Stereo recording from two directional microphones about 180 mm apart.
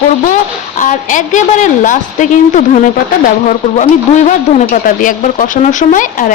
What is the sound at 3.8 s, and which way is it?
Speech, 40° left (ahead or behind).